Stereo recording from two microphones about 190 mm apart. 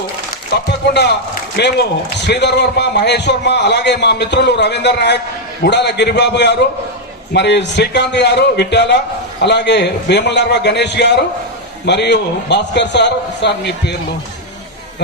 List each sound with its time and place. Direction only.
0.5 s a man's voice: 60° left (ahead or behind)